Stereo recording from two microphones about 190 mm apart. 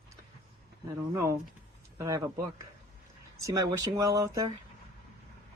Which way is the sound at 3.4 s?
15° right (ahead or behind).